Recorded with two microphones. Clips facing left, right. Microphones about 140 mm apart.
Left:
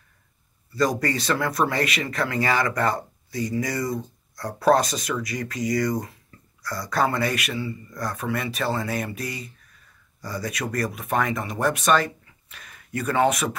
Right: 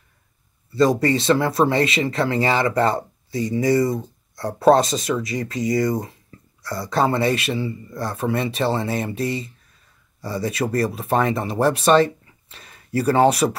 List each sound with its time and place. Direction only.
0.7 s speech: 25° right (ahead or behind)